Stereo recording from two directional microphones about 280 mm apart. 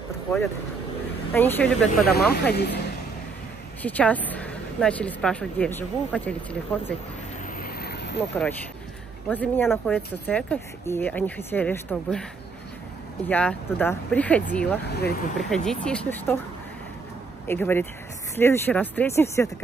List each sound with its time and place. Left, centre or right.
1.3 s speech: centre
1.9 s speech: left
3.8 s speech: centre
7.5 s vehicle: left
9.3 s speech: centre
13.3 s speech: centre
14.9 s speech: left
15.3 s speech: centre
17.5 s speech: centre